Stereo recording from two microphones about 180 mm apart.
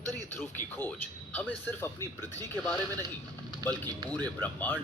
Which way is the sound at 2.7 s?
20° right (ahead or behind).